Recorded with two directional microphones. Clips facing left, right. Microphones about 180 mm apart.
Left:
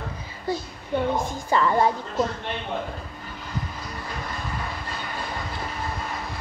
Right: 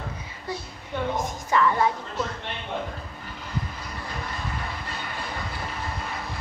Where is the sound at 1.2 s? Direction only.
30° left (ahead or behind).